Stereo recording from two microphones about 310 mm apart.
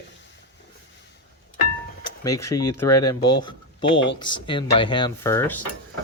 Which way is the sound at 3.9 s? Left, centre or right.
Left.